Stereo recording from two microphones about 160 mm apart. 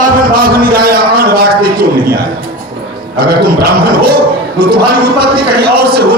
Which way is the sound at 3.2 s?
70° right (ahead or behind).